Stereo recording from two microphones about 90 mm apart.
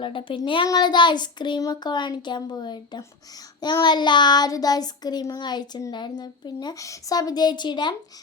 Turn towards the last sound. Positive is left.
turn(degrees=55)  # may be behind; listen again after turning